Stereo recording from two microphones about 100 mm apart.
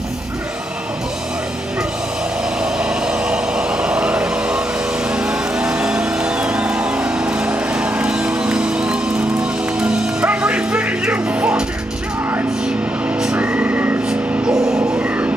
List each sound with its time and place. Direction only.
2.6 s a sound: 10° right (ahead or behind)
5.1 s vehicle: 10° right (ahead or behind)
13.2 s music: 15° right (ahead or behind)
15.0 s music: 15° right (ahead or behind)